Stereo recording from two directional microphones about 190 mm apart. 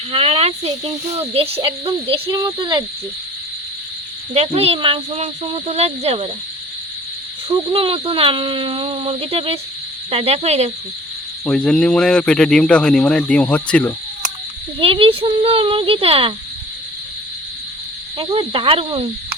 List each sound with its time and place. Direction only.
0.1 s speech: 30° right (ahead or behind)
4.4 s speech: 30° right (ahead or behind)
7.4 s speech: 30° right (ahead or behind)
11.4 s speech: 5° left (ahead or behind)
14.8 s speech: 30° right (ahead or behind)
18.2 s speech: 25° right (ahead or behind)